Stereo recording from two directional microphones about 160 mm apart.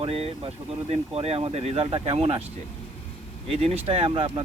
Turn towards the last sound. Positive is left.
turn(degrees=-35)  # may be behind; listen again after turning